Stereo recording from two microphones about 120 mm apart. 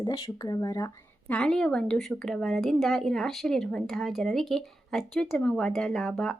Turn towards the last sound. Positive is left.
turn(degrees=5)  # may be behind; listen again after turning